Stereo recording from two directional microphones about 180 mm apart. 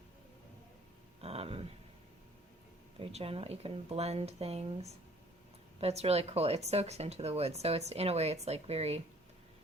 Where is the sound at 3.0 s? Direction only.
35° right (ahead or behind).